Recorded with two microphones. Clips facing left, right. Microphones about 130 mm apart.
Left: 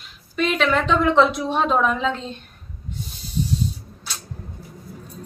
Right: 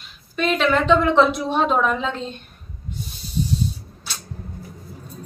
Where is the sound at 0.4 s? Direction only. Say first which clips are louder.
Right 1 dB; centre (ahead or behind).